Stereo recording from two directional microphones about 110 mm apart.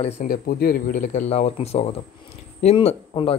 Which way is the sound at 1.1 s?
85° left.